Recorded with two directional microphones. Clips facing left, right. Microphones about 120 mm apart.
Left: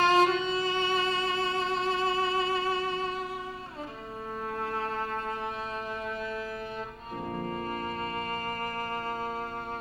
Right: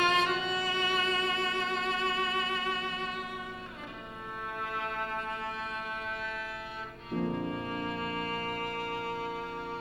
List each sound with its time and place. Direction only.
0.0 s music: 35° left (ahead or behind)
7.4 s music: 40° left (ahead or behind)